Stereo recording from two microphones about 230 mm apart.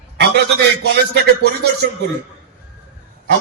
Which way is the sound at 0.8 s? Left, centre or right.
Right.